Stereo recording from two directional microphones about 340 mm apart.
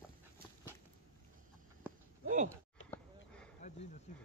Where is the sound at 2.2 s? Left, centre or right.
Right.